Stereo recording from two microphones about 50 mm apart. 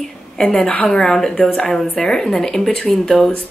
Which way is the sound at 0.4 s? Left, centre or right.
Centre.